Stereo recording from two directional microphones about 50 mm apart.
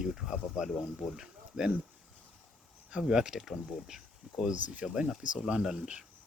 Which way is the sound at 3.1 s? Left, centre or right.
Centre.